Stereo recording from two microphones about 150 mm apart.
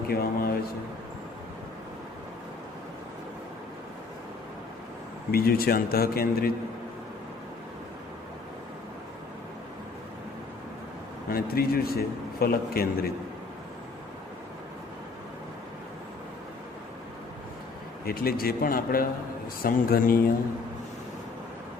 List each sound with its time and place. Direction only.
0.1 s a man's voice: 85° left
5.3 s a man's voice: 85° left
11.3 s a man's voice: 85° left
18.0 s a man's voice: 90° left; by 20.3 s 70° left (ahead or behind)